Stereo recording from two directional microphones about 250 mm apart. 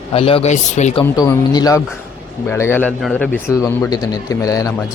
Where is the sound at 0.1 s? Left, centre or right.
Left.